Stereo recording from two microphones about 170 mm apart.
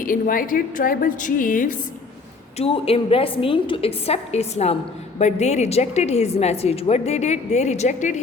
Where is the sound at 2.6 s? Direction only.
35° left (ahead or behind).